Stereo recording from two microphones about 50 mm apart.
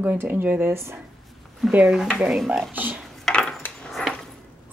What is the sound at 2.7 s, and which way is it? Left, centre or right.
Speech, right.